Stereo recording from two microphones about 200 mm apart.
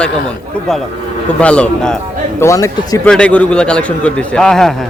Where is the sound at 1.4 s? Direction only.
5° left (ahead or behind).